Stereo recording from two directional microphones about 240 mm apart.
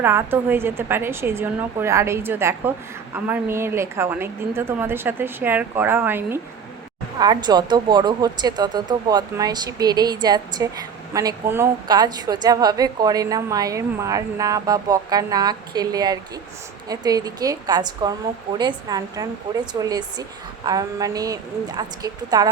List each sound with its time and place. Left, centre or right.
0.0 s a woman's voice: centre